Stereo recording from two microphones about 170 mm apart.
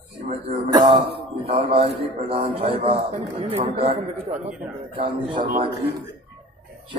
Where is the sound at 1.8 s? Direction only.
35° right (ahead or behind).